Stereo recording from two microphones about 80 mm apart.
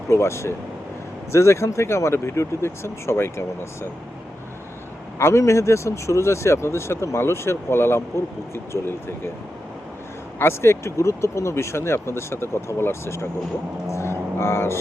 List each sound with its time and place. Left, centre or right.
0.1 s speech: left
5.2 s speech: left
10.3 s speech: left